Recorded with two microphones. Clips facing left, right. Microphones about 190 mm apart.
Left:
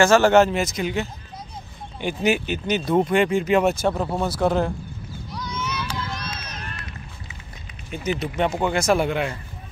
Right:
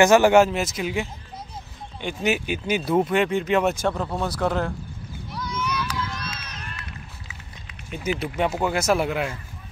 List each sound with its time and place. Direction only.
0.0 s speech: 15° right (ahead or behind)
2.0 s speech: 5° left (ahead or behind)
2.3 s speech: 5° right (ahead or behind)
3.8 s speech: 10° left (ahead or behind)
5.5 s a sound: 25° left (ahead or behind)
6.0 s run: 40° left (ahead or behind)
7.9 s speech: 5° right (ahead or behind)